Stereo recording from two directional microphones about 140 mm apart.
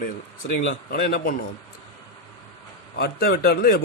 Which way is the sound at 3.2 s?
90° left.